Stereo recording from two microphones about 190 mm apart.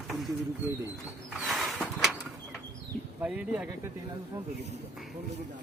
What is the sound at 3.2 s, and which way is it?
Speech, 5° right (ahead or behind).